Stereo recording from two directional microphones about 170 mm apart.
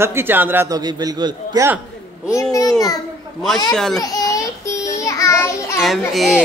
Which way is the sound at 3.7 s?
5° left (ahead or behind).